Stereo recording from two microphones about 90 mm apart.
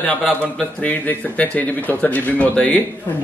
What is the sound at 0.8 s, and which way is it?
A man's voice, 20° left (ahead or behind).